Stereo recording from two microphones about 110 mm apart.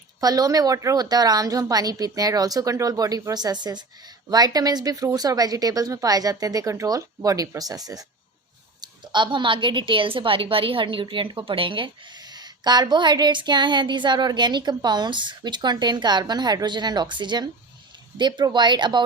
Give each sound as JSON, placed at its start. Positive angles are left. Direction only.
{"t": 0.2, "sound": "a woman's voice", "side_deg": -35}
{"t": 12.3, "sound": "a woman's voice", "side_deg": -40}